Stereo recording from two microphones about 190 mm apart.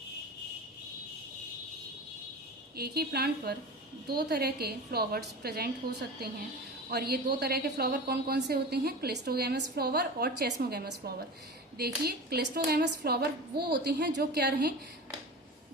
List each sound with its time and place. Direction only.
2.7 s a woman's voice: 55° right (ahead or behind)